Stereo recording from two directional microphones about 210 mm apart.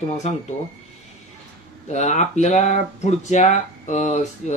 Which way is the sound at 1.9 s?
35° left (ahead or behind).